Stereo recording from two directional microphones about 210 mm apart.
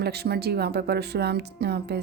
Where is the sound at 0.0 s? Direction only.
50° right (ahead or behind).